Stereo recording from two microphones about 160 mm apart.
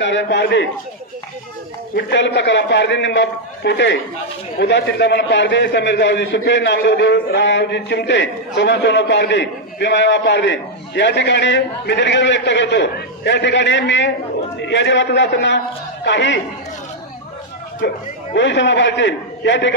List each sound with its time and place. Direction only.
0.0 s a man's voice: 90° left
2.0 s a man's voice: 90° left
17.7 s a man's voice: 90° left